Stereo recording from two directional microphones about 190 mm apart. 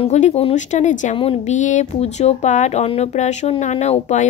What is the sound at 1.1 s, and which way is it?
A woman's voice, 30° left (ahead or behind).